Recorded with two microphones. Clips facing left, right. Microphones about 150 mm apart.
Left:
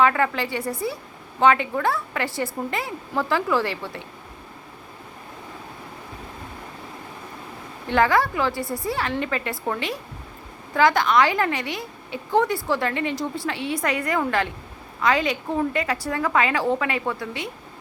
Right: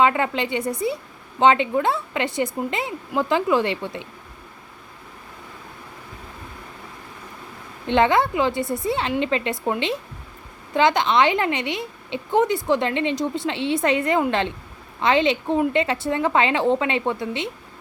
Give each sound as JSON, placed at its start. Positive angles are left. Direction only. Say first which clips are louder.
{"t": 0.0, "sound": "a woman's voice", "louder": "right 1 dB", "side_deg": -20}
{"t": 7.9, "sound": "a woman's voice", "louder": "right 2 dB", "side_deg": -20}